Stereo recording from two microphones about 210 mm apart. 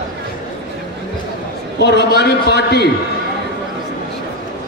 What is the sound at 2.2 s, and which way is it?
Speech, 55° left (ahead or behind).